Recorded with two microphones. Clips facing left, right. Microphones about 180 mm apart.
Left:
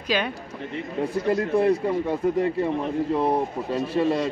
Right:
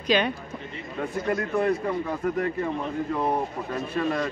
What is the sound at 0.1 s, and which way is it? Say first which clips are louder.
Speech: right 2 dB; 5° left (ahead or behind).